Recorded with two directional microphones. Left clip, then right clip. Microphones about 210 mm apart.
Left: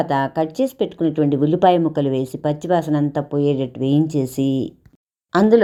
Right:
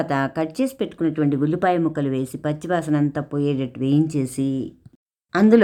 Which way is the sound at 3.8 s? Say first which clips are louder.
Right 1 dB; 30° right (ahead or behind).